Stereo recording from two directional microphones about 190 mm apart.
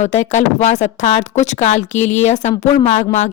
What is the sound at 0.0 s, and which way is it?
Speech, 40° left (ahead or behind).